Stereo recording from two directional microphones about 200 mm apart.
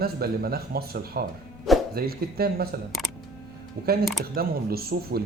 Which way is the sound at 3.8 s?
45° right (ahead or behind).